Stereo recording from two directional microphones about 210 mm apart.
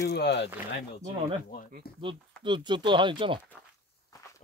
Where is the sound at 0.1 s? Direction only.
55° left (ahead or behind).